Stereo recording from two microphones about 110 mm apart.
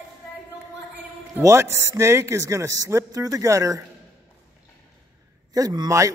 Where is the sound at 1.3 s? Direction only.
25° right (ahead or behind).